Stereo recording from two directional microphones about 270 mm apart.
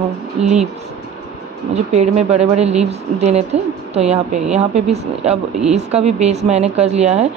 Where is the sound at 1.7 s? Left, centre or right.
Right.